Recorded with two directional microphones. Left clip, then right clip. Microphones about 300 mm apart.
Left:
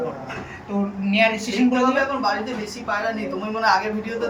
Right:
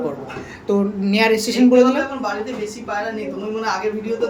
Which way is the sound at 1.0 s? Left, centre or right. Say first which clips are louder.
Right 2 dB; centre.